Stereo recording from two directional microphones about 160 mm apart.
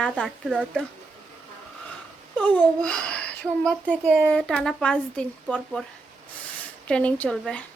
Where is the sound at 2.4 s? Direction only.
10° left (ahead or behind).